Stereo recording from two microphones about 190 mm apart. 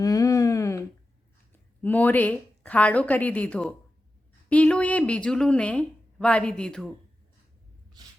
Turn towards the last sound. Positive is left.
turn(degrees=5)  # may be behind; listen again after turning